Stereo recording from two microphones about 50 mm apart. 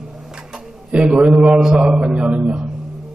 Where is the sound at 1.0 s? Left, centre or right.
Right.